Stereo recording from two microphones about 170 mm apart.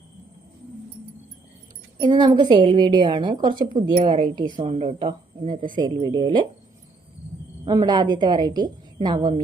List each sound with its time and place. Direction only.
2.0 s a woman's voice: 25° right (ahead or behind)
4.6 s a woman's voice: 40° right (ahead or behind)
7.6 s a woman's voice: 25° right (ahead or behind)